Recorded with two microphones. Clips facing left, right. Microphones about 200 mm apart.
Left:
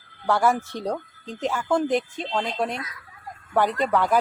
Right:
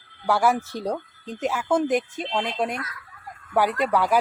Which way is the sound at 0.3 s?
10° right (ahead or behind).